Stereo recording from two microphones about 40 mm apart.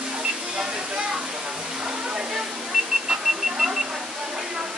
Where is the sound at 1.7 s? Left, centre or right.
Centre.